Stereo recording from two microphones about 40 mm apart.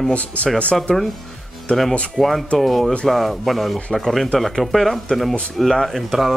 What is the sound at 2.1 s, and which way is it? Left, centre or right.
Speech, centre.